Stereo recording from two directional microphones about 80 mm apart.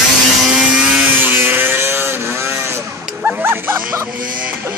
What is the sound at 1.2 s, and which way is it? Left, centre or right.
Vehicle, right.